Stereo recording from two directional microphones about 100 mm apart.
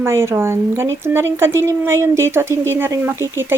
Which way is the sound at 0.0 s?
25° right (ahead or behind).